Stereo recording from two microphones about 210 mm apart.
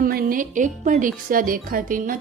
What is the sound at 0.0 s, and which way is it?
A woman's voice, 45° right (ahead or behind).